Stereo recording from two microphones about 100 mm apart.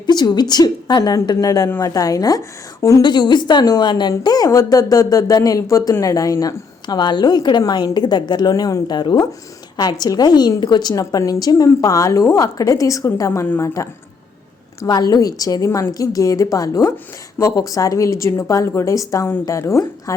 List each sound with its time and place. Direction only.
0.0 s a woman's voice: 45° left (ahead or behind)
6.8 s a woman's voice: 45° left (ahead or behind); by 13.8 s 30° left (ahead or behind)
14.8 s speech: 40° left (ahead or behind)